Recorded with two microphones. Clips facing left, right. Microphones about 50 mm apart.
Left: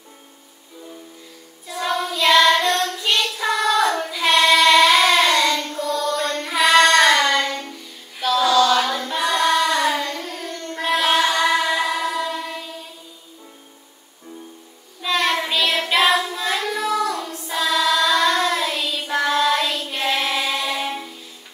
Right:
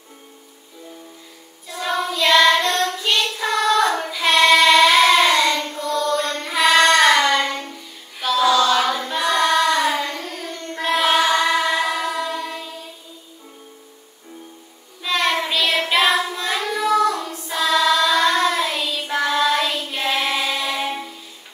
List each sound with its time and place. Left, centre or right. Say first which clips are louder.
1.7 s child singing: even; centre
15.0 s child singing: even; centre